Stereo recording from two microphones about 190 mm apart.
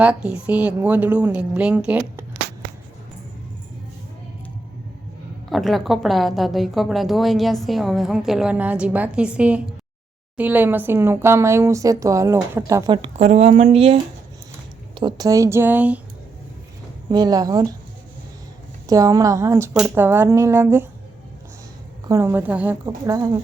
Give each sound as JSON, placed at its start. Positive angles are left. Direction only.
{"t": 0.0, "sound": "a woman's voice", "side_deg": -5}
{"t": 5.5, "sound": "a woman's voice", "side_deg": 0}
{"t": 17.1, "sound": "speech", "side_deg": -20}
{"t": 18.9, "sound": "speech", "side_deg": -20}
{"t": 22.1, "sound": "speech", "side_deg": -10}